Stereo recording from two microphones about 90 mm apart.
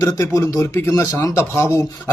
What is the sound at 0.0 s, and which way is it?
Speech, 35° left (ahead or behind).